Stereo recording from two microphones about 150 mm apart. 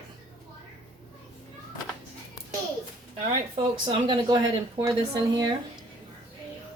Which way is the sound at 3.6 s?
30° right (ahead or behind).